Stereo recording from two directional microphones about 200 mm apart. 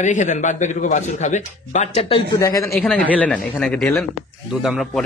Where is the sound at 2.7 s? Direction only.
Centre (ahead or behind).